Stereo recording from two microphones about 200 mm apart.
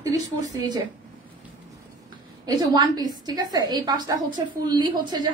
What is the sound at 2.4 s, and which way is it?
A woman's voice, 20° right (ahead or behind).